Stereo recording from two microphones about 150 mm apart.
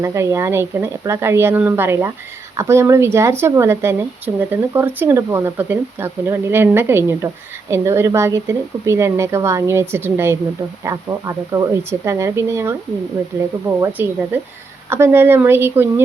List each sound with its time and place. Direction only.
0.0 s speech: 20° right (ahead or behind)